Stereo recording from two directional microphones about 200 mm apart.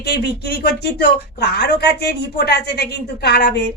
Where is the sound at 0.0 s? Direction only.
55° left (ahead or behind).